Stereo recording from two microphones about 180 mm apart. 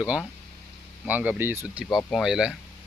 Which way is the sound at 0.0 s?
Centre (ahead or behind).